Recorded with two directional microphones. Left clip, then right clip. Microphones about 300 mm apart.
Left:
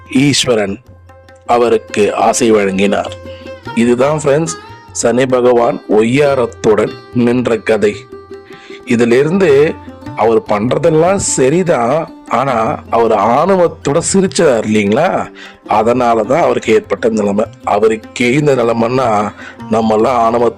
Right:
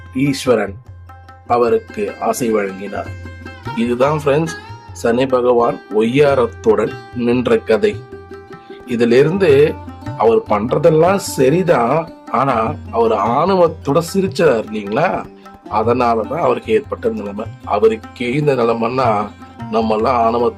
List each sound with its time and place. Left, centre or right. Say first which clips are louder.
0.3 s speech: left 1 dB; left